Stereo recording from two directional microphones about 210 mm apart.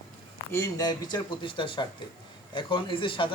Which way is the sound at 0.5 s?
15° left (ahead or behind).